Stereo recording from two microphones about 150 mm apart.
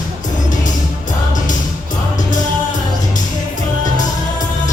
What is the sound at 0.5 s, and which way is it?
Music, 55° left (ahead or behind).